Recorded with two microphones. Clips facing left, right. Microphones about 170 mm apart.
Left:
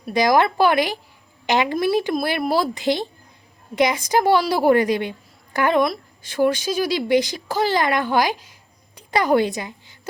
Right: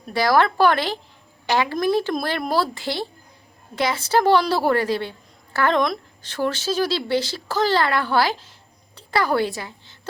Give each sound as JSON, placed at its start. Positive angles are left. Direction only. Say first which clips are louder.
{"t": 0.0, "sound": "a woman's voice", "louder": "left 1 dB", "side_deg": 15}